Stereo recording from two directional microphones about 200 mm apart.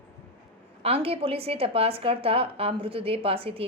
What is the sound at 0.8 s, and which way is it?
A woman's voice, 30° right (ahead or behind).